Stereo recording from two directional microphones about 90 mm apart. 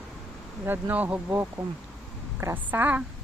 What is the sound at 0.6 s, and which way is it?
Speech, 20° right (ahead or behind).